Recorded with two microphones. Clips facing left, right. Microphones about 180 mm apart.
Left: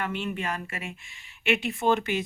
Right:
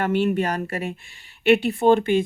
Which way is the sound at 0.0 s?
45° right (ahead or behind).